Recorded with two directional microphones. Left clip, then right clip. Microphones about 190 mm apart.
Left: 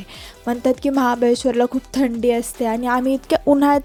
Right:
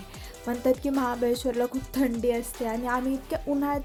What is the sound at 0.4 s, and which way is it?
Speech, 35° left (ahead or behind).